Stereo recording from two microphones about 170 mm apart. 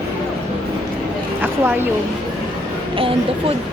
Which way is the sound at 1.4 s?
10° right (ahead or behind).